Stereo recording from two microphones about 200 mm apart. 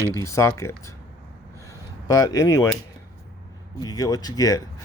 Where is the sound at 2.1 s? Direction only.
15° left (ahead or behind).